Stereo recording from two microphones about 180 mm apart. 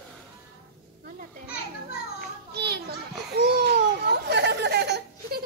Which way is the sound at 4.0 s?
70° right (ahead or behind).